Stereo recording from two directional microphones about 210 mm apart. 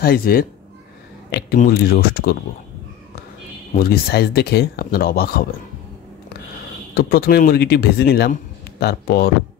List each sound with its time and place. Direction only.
0.0 s speech: 45° left (ahead or behind)
3.7 s speech: 45° left (ahead or behind)
6.9 s speech: 45° left (ahead or behind)